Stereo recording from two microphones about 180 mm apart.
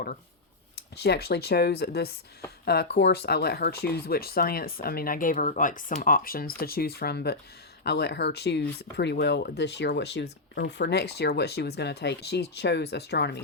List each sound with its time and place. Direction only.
0.9 s speech: 65° left (ahead or behind)